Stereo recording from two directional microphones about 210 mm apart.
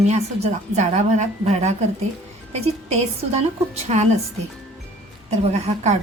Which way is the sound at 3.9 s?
30° right (ahead or behind).